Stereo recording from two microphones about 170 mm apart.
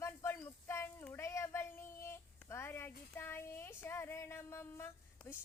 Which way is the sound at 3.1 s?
15° left (ahead or behind).